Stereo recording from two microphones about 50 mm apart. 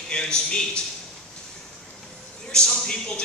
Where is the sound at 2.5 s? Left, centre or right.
Centre.